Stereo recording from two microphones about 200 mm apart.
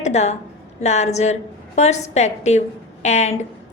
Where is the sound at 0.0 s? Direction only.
35° left (ahead or behind).